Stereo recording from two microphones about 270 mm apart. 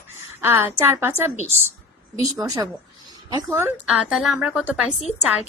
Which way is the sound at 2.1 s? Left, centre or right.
Centre.